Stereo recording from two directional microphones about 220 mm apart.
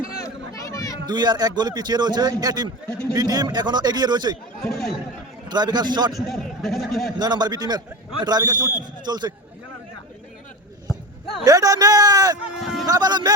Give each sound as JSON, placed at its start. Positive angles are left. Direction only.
{"t": 0.5, "sound": "chatter", "side_deg": 15}
{"t": 1.0, "sound": "a man's voice", "side_deg": -20}
{"t": 4.6, "sound": "speech", "side_deg": 0}
{"t": 5.5, "sound": "a man's voice", "side_deg": -20}
{"t": 6.1, "sound": "speech", "side_deg": 0}
{"t": 7.2, "sound": "a man's voice", "side_deg": -20}
{"t": 11.4, "sound": "a man's voice", "side_deg": -15}
{"t": 12.4, "sound": "speech", "side_deg": 0}
{"t": 12.8, "sound": "a man's voice", "side_deg": -15}